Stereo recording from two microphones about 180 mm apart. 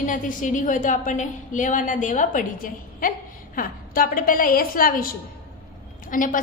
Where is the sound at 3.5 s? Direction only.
50° left (ahead or behind).